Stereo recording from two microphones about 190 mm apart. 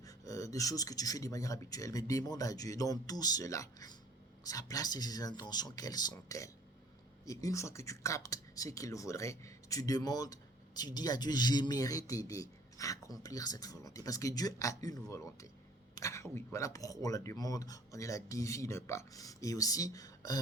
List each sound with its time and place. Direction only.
0.0 s speech: 15° left (ahead or behind)